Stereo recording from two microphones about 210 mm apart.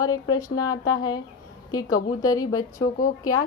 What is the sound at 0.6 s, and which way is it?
Speech, 20° left (ahead or behind).